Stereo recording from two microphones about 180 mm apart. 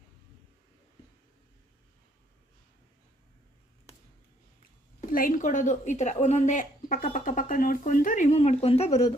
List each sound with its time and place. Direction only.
4.6 s a woman's voice: 50° left (ahead or behind); by 9.0 s 35° left (ahead or behind)